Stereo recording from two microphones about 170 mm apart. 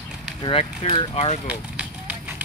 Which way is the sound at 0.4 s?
35° left (ahead or behind).